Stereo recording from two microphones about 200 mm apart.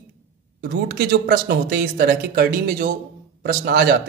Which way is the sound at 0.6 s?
50° right (ahead or behind).